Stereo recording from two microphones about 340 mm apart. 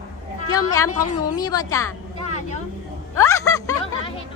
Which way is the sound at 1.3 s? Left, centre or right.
Centre.